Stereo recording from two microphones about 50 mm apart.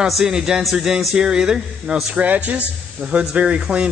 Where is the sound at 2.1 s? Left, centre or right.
Right.